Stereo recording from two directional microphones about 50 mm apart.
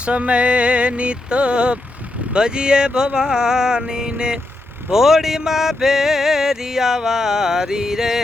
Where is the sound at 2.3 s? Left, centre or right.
Centre.